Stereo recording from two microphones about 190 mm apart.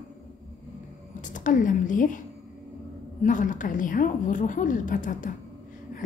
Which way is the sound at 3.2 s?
45° left (ahead or behind).